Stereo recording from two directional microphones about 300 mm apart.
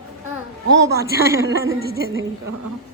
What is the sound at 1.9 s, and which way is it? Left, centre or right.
Speech, right.